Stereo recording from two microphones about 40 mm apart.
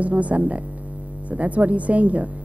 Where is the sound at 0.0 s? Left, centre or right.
Right.